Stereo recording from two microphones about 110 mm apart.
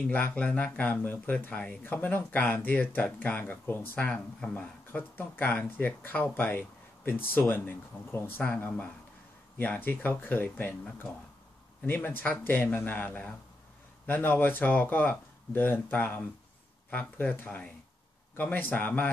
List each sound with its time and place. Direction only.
0.1 s speech: 15° left (ahead or behind)